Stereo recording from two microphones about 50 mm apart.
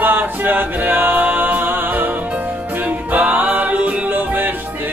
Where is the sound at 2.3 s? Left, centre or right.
Right.